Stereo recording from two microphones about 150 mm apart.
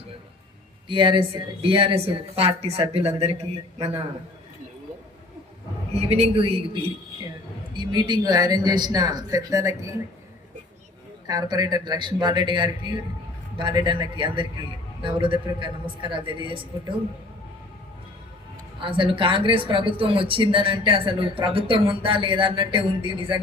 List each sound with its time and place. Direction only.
0.9 s speech: 35° right (ahead or behind)
5.9 s speech: 40° right (ahead or behind)
7.8 s speech: 30° right (ahead or behind)
11.3 s speech: 25° right (ahead or behind)
18.8 s speech: 35° right (ahead or behind)